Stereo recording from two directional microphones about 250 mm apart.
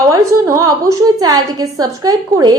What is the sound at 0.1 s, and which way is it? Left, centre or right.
A woman's voice, centre.